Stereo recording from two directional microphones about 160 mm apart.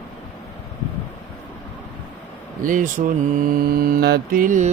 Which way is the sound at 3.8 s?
65° right (ahead or behind).